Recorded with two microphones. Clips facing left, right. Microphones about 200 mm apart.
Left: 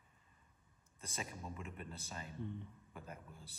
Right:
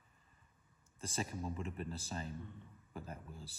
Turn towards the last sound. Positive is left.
turn(degrees=-30)  # may be behind; listen again after turning